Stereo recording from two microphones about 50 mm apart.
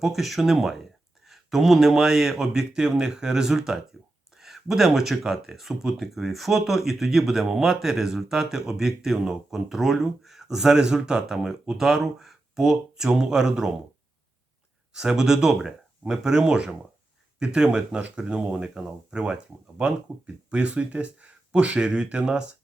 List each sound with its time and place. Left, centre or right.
0.0 s speech: centre
14.9 s speech: centre